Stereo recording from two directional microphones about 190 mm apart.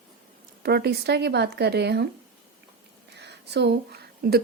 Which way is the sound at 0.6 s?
60° right (ahead or behind).